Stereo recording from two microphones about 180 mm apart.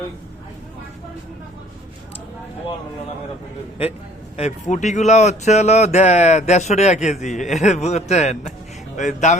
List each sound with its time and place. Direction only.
4.4 s speech: 40° left (ahead or behind)